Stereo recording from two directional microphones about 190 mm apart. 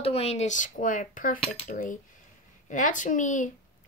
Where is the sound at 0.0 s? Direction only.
30° left (ahead or behind).